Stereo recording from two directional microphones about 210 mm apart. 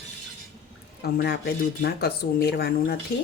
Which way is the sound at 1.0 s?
50° left (ahead or behind).